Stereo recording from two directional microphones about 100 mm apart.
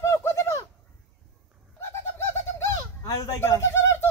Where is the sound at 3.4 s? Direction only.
25° left (ahead or behind).